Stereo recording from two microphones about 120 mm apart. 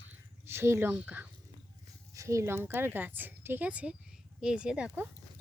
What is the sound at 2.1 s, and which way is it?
Speech, 25° right (ahead or behind).